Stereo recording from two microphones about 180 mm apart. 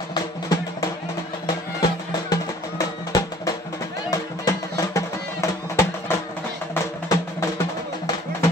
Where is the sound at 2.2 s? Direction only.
20° left (ahead or behind).